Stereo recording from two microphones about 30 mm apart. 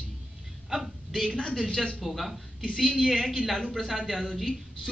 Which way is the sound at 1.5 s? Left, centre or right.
Centre.